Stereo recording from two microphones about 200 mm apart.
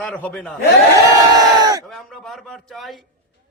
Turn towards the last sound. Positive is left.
turn(degrees=0)  # may be behind; listen again after turning